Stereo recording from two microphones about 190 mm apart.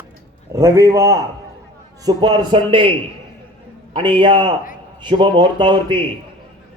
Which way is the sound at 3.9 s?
25° right (ahead or behind).